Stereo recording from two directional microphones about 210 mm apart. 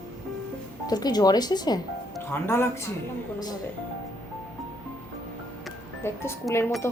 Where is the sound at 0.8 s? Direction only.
20° left (ahead or behind).